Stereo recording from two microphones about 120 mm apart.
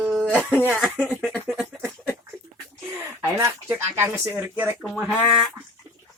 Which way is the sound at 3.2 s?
20° right (ahead or behind).